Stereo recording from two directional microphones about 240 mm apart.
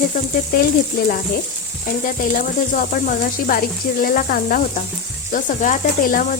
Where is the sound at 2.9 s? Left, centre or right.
Left.